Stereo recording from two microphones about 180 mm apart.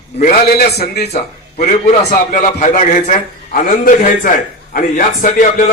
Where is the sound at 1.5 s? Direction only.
40° left (ahead or behind).